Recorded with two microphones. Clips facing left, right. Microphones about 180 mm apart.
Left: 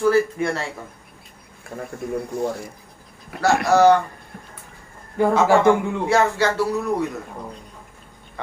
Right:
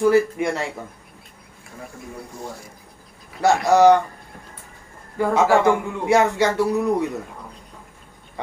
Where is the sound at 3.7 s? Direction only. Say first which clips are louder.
Right 1 dB; 20° right (ahead or behind).